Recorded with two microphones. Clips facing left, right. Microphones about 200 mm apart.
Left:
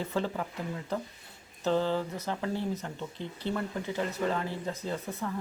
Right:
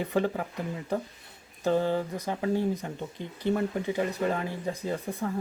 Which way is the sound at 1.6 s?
15° right (ahead or behind).